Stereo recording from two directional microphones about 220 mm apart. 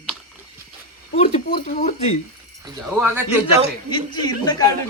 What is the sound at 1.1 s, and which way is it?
Speech, 30° left (ahead or behind).